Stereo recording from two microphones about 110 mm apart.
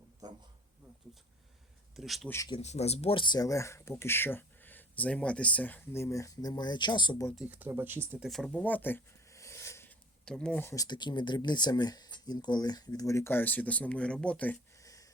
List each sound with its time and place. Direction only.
2.0 s speech: centre (ahead or behind)
2.6 s speech: 80° left
3.2 s speech: 40° left (ahead or behind)
7.4 s speech: 15° right (ahead or behind)
8.2 s speech: 5° left (ahead or behind)
8.6 s a sound: 15° left (ahead or behind)
10.2 s speech: 5° left (ahead or behind)
10.6 s speech: 25° left (ahead or behind)
10.8 s speech: 45° left (ahead or behind); by 14.6 s 15° left (ahead or behind)
14.8 s a sound: 30° left (ahead or behind)